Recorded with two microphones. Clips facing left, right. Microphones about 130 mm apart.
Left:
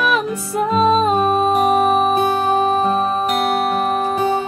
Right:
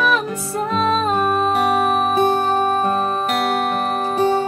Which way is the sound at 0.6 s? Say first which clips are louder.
Left 4 dB; 10° left (ahead or behind).